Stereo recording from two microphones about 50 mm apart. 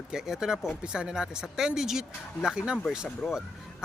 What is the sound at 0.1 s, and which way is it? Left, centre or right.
Speech, centre.